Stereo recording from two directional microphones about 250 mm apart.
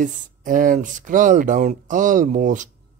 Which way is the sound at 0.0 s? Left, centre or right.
Right.